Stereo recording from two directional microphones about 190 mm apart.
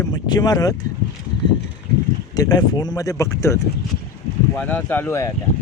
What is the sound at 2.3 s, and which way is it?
Speech, 20° left (ahead or behind).